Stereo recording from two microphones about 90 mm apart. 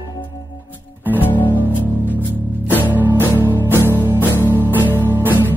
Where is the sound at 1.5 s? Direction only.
20° right (ahead or behind).